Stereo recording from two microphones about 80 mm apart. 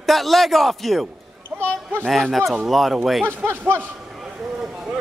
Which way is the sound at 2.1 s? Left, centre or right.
Centre.